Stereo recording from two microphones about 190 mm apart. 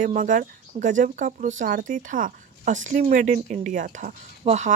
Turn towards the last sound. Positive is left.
turn(degrees=-35)  # may be behind; listen again after turning